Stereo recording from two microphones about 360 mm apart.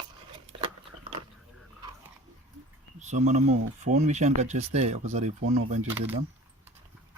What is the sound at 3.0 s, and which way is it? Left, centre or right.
Speech, centre.